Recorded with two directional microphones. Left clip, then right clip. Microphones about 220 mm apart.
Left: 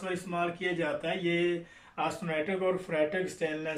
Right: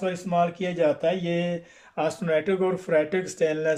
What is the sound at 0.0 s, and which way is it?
Speech, 45° right (ahead or behind).